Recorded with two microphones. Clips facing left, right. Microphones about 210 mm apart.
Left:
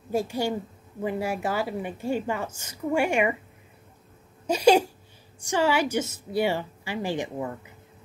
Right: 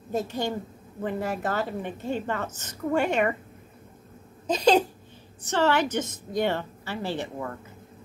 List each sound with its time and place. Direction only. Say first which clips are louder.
0.1 s a woman's voice: left 2 dB; 10° left (ahead or behind)
4.5 s a woman's voice: left 2 dB; 10° left (ahead or behind)